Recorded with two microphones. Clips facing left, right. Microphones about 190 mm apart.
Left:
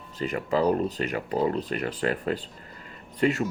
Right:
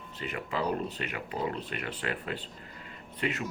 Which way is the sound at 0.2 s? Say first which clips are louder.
Left 8 dB; 40° left (ahead or behind).